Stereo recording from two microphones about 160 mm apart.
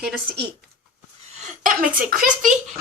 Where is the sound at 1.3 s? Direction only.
50° right (ahead or behind).